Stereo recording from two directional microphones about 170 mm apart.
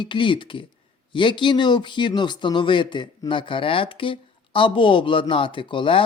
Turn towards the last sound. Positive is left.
turn(degrees=30)  # may be behind; listen again after turning